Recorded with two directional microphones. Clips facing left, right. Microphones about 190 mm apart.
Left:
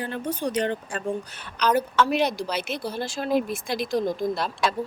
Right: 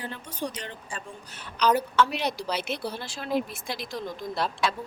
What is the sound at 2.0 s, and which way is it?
Speech, 50° left (ahead or behind).